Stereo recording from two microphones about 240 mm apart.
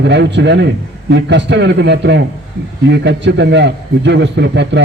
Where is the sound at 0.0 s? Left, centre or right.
Right.